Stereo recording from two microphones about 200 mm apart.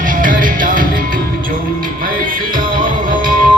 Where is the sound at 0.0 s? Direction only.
45° right (ahead or behind).